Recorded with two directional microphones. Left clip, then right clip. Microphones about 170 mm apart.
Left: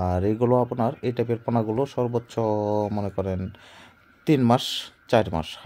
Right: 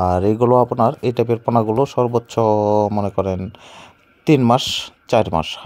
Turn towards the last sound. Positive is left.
turn(degrees=-25)  # may be behind; listen again after turning